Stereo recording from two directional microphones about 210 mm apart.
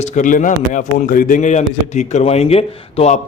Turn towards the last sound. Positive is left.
turn(degrees=30)  # may be behind; listen again after turning